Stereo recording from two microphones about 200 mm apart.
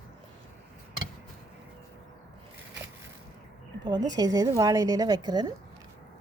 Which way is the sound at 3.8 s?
20° right (ahead or behind).